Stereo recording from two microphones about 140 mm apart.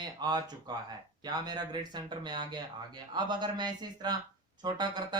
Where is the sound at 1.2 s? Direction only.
30° right (ahead or behind).